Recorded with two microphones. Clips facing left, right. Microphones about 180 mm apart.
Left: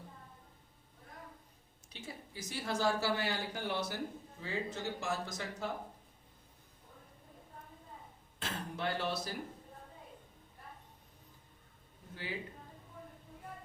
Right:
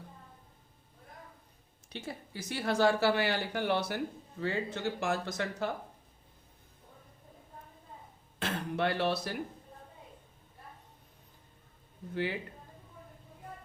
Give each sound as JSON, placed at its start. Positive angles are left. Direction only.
{"t": 1.9, "sound": "speech", "side_deg": -65}
{"t": 8.4, "sound": "a sound", "side_deg": -65}
{"t": 12.1, "sound": "a man's voice", "side_deg": -65}